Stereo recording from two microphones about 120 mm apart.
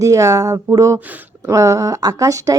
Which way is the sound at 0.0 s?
25° right (ahead or behind).